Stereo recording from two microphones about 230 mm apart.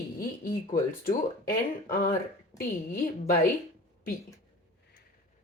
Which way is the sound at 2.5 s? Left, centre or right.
Left.